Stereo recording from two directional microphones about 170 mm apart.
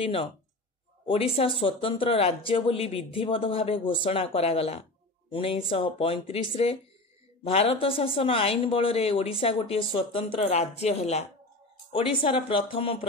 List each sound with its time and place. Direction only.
0.0 s speech: 30° left (ahead or behind)